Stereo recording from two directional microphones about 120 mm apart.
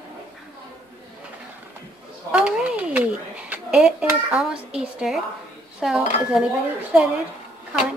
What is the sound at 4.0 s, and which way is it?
Speech, 20° right (ahead or behind).